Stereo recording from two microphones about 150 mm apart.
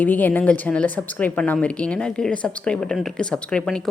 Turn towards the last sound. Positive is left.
turn(degrees=5)  # may be behind; listen again after turning